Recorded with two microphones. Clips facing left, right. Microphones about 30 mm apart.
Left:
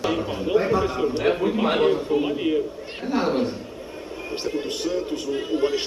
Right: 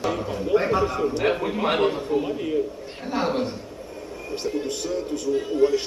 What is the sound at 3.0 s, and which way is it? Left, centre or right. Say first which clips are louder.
Speech: left 2 dB; centre.